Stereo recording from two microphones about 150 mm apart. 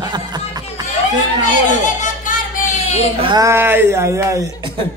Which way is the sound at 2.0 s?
55° left (ahead or behind).